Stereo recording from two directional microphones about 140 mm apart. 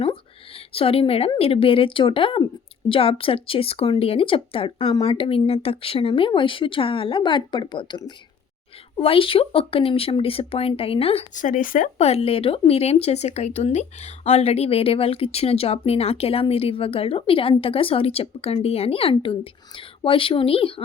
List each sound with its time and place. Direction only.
0.0 s a sound: 45° left (ahead or behind)
1.4 s speech: 40° left (ahead or behind)
11.3 s speech: 70° left (ahead or behind)
11.9 s speech: 50° left (ahead or behind)